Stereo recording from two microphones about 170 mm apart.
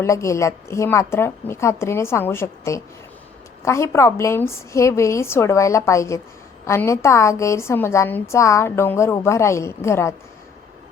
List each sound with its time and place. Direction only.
0.0 s a woman's voice: 15° left (ahead or behind)